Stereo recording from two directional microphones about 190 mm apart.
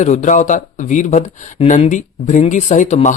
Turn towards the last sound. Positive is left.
turn(degrees=40)  # may be behind; listen again after turning